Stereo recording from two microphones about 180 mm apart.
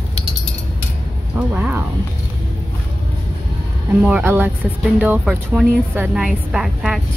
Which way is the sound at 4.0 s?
10° right (ahead or behind).